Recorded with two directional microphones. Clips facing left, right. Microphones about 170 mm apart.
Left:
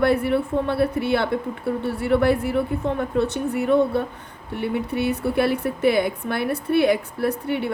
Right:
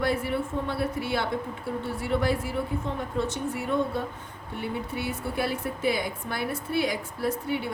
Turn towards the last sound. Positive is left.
turn(degrees=60)  # may be behind; listen again after turning